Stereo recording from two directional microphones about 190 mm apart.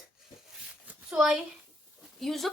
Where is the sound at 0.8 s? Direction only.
5° right (ahead or behind).